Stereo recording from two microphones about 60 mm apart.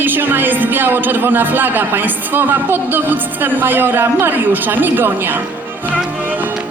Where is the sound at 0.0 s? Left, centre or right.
Right.